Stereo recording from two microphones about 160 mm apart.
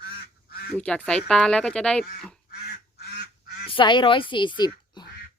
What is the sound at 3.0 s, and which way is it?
Duck, 75° left (ahead or behind).